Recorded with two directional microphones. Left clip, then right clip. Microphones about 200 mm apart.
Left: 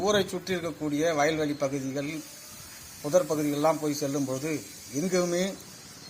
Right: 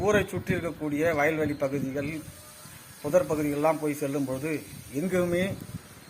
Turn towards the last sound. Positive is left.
turn(degrees=-15)  # may be behind; listen again after turning